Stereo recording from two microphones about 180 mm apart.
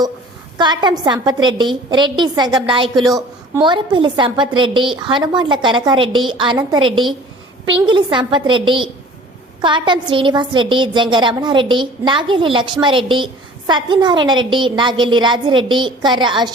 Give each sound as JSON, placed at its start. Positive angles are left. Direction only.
{"t": 0.6, "sound": "a woman's voice", "side_deg": -25}